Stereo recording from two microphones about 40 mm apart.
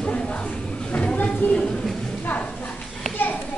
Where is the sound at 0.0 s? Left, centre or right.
Left.